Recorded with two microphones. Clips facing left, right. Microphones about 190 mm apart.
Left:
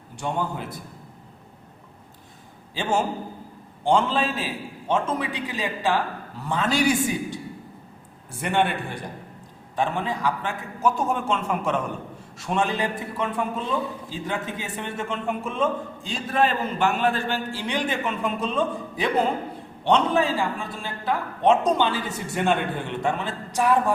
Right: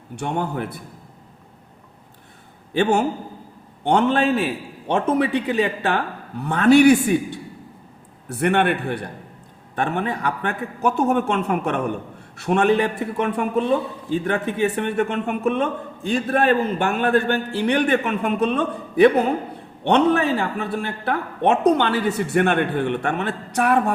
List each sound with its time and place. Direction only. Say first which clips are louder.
0.2 s a man's voice: right 3 dB; 60° right (ahead or behind)
3.8 s a man's voice: right 4 dB; 65° right (ahead or behind)